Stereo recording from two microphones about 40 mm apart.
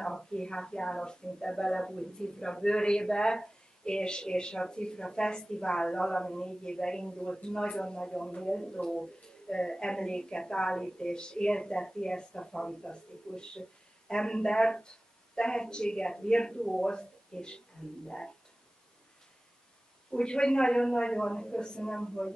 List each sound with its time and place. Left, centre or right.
0.0 s speech: centre
20.1 s speech: centre